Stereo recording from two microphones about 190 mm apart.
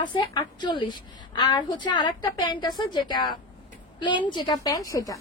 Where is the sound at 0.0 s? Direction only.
25° left (ahead or behind).